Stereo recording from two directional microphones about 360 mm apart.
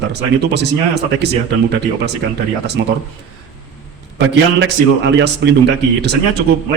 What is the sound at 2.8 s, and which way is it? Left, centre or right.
Speech, right.